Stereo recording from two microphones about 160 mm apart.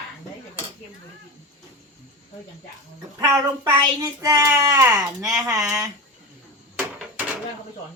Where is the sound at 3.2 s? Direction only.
25° right (ahead or behind).